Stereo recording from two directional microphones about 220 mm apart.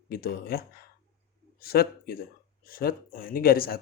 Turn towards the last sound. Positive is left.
turn(degrees=45)  # may be behind; listen again after turning